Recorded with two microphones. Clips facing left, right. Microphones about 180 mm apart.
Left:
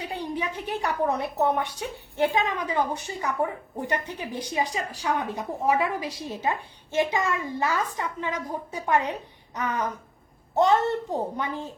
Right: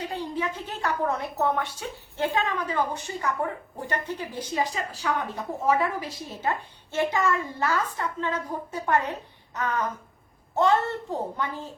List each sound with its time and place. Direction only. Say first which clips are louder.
0.0 s a woman's voice: right 1 dB; 15° left (ahead or behind)